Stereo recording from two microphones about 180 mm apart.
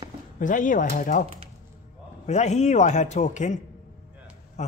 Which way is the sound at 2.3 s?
40° left (ahead or behind).